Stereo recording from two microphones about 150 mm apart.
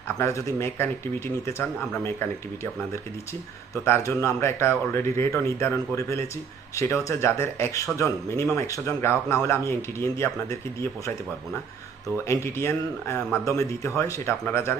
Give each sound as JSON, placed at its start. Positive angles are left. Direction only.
{"t": 0.2, "sound": "speech", "side_deg": 20}
{"t": 3.8, "sound": "a man's voice", "side_deg": 20}
{"t": 12.1, "sound": "a man's voice", "side_deg": 20}